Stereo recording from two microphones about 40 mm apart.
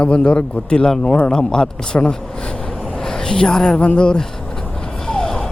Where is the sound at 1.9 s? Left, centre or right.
Left.